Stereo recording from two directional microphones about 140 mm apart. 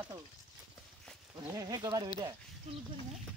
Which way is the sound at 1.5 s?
25° right (ahead or behind).